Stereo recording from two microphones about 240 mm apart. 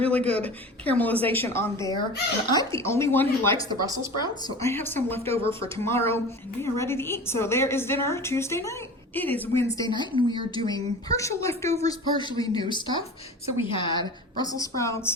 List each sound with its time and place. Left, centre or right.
0.0 s a woman's voice: centre